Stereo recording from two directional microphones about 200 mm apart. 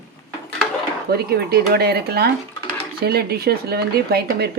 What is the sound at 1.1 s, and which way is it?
Speech, 55° right (ahead or behind).